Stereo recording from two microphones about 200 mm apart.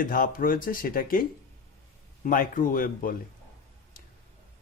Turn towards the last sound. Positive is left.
turn(degrees=45)  # may be behind; listen again after turning